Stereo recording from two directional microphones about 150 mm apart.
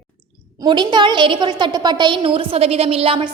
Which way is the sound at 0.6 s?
30° right (ahead or behind).